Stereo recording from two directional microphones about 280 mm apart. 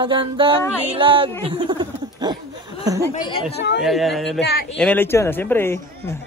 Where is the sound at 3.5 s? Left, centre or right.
Left.